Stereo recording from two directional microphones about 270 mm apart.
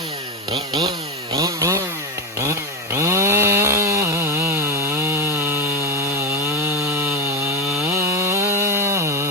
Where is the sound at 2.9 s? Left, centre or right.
Centre.